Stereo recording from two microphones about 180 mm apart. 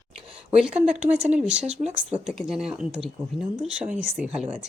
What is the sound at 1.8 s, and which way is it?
Speech, 40° right (ahead or behind).